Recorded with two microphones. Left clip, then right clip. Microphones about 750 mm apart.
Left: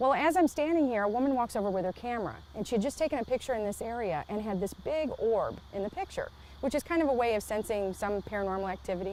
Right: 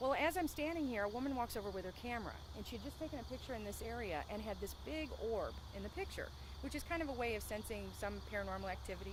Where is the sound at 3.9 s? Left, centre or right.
Left.